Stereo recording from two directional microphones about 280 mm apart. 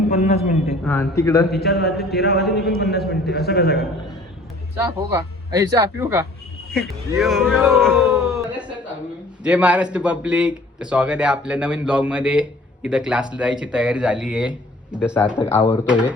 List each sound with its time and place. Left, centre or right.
0.1 s a man's voice: left
0.9 s a man's voice: centre
1.5 s a man's voice: left
4.8 s speech: centre
15.5 s a man's voice: centre
15.9 s speech: centre